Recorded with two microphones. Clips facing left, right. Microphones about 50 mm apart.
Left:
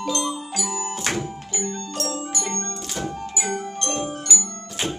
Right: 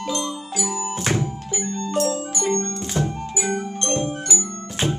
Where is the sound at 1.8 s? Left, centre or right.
Centre.